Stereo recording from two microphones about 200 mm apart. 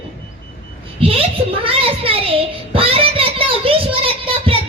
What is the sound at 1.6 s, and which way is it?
Child singing, 30° right (ahead or behind).